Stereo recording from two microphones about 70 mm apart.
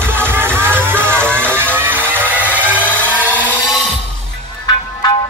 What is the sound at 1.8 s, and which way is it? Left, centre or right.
Music, right.